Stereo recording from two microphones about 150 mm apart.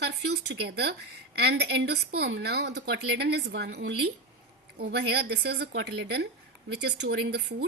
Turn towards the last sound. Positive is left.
turn(degrees=-90)